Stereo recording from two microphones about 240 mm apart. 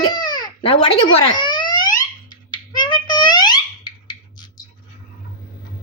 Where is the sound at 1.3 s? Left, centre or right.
Centre.